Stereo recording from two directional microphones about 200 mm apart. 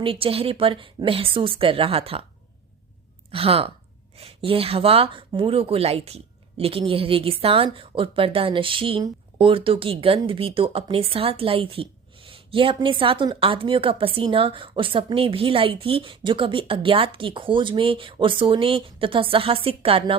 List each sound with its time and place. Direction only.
0.0 s speech: 25° right (ahead or behind)
3.3 s speech: 30° right (ahead or behind)